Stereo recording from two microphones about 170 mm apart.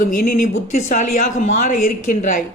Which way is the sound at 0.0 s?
50° left (ahead or behind).